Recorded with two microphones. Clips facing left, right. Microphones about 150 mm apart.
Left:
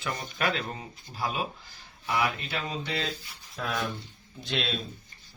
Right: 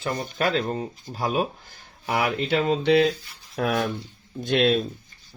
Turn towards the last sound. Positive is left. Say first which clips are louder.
# right 12 dB
turn(degrees=-55)  # may be behind; listen again after turning